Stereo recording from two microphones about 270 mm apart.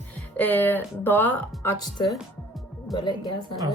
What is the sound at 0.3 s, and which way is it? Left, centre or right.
Speech, centre.